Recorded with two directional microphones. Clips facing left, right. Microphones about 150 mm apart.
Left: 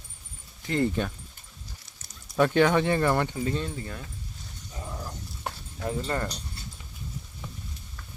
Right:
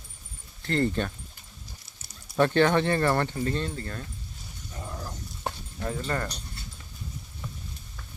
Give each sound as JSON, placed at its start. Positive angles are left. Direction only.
{"t": 0.6, "sound": "speech", "side_deg": 10}
{"t": 2.4, "sound": "speech", "side_deg": 10}
{"t": 5.8, "sound": "speech", "side_deg": 20}